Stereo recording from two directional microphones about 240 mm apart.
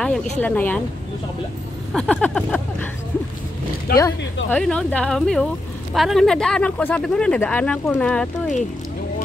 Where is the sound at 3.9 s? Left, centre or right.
Left.